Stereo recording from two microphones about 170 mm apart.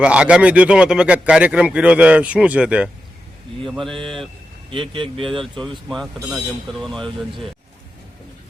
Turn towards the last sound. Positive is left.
turn(degrees=0)  # may be behind; listen again after turning